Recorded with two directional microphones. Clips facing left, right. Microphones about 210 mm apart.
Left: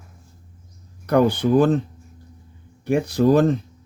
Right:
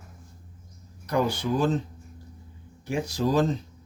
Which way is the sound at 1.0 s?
60° left (ahead or behind).